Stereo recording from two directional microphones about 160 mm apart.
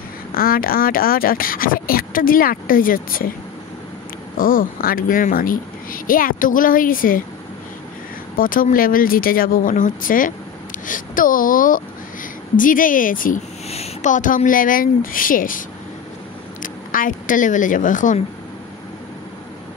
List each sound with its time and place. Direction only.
0.3 s speech: 65° left (ahead or behind)
4.4 s speech: 60° left (ahead or behind)
8.4 s speech: 60° left (ahead or behind)
13.7 s speech: 45° left (ahead or behind)
16.6 s speech: 55° left (ahead or behind)